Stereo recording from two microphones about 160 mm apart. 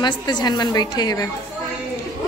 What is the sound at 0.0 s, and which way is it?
A woman's voice, 25° left (ahead or behind).